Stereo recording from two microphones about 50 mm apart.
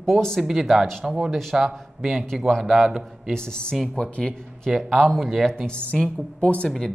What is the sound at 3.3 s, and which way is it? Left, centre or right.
Speech, centre.